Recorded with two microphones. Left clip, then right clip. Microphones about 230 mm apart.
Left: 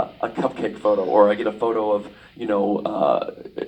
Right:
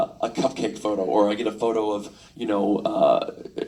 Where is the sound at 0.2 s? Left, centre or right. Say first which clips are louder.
Left 1 dB; right.